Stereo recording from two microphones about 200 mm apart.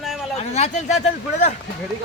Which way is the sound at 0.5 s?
35° left (ahead or behind).